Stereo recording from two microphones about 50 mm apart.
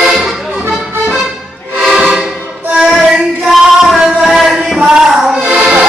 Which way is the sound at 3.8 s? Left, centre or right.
Centre.